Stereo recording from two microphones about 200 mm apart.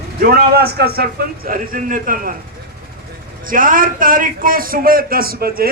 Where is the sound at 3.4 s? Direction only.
45° right (ahead or behind).